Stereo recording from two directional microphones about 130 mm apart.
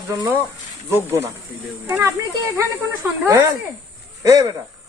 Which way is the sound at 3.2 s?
25° right (ahead or behind).